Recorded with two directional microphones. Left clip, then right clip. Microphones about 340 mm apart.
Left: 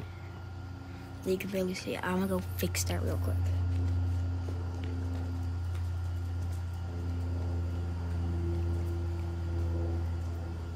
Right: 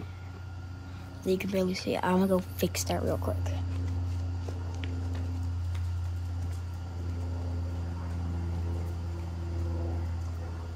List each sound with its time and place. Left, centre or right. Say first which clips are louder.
1.2 s speech: right 3 dB; centre